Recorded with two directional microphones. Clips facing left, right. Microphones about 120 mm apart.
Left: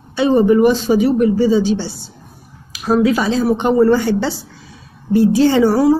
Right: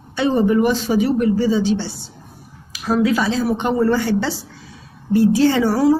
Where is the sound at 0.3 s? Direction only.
20° left (ahead or behind).